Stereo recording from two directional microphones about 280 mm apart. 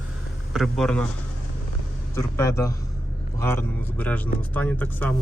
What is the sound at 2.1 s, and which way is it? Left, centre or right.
Speech, centre.